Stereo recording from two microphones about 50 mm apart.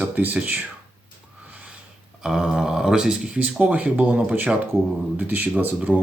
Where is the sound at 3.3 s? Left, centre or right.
Right.